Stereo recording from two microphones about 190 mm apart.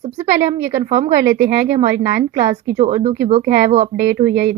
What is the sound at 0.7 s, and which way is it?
Speech, 40° right (ahead or behind).